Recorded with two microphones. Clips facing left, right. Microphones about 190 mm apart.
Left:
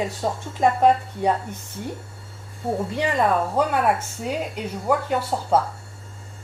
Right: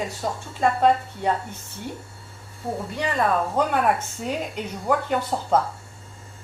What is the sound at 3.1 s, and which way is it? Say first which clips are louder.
Speech: left 1 dB; 5° left (ahead or behind).